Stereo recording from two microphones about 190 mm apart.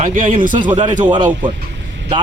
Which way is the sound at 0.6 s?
25° right (ahead or behind).